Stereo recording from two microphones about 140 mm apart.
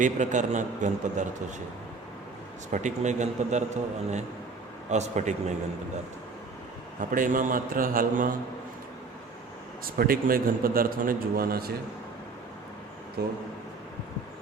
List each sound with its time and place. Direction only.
0.0 s a man's voice: 60° right (ahead or behind)
2.7 s a man's voice: 60° right (ahead or behind)
4.9 s a man's voice: 55° right (ahead or behind)
7.1 s a man's voice: 75° right (ahead or behind)
10.0 s a man's voice: 90° right
13.2 s a man's voice: 90° right